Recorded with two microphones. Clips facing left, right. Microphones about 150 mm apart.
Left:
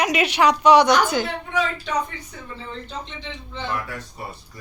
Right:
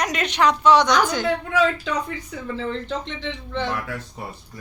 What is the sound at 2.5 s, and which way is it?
Speech, 85° right.